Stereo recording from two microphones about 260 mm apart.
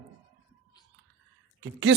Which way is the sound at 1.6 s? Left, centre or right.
Right.